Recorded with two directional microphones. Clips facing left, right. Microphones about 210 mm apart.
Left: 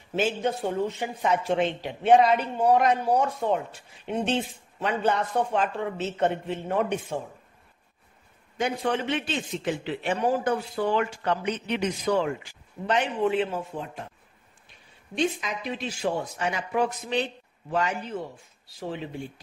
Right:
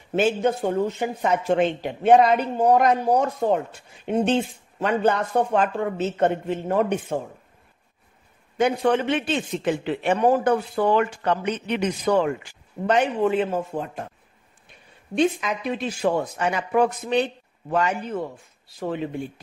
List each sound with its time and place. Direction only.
0.1 s speech: 50° right (ahead or behind)
8.5 s a man's voice: 55° right (ahead or behind)
15.1 s a man's voice: 55° right (ahead or behind)